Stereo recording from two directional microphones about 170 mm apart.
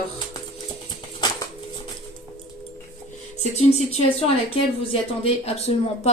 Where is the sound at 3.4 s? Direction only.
40° left (ahead or behind).